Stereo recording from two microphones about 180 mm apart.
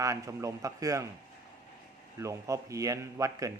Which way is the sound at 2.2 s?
15° right (ahead or behind).